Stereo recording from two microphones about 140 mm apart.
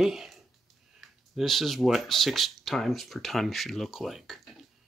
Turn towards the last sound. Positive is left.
turn(degrees=0)  # may be behind; listen again after turning